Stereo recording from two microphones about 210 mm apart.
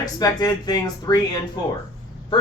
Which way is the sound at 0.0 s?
20° left (ahead or behind).